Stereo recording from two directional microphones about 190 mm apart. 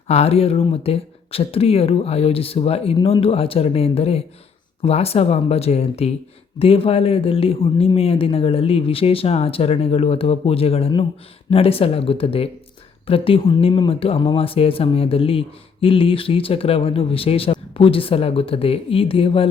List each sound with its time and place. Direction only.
0.1 s speech: 30° left (ahead or behind)